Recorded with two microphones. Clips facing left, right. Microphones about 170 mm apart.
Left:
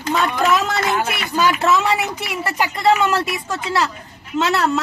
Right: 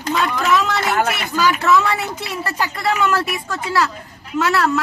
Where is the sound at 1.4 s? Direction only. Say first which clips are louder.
Even; 25° left (ahead or behind).